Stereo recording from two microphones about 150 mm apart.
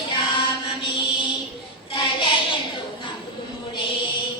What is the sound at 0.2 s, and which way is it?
Child singing, 35° left (ahead or behind).